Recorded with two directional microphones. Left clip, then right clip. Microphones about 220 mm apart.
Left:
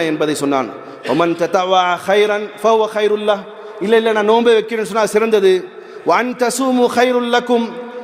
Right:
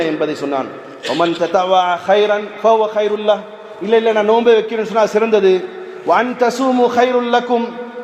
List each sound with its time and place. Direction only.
0.0 s a man's voice: 50° left (ahead or behind)